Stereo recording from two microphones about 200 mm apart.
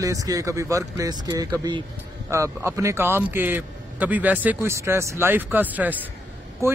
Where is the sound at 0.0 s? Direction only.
15° right (ahead or behind).